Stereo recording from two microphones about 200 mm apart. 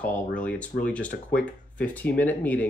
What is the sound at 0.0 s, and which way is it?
Speech, 5° left (ahead or behind).